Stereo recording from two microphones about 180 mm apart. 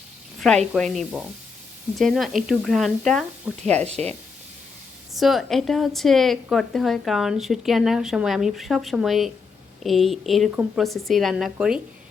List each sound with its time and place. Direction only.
0.3 s a woman's voice: centre (ahead or behind)
3.8 s speech: 35° right (ahead or behind)
5.1 s a woman's voice: centre (ahead or behind)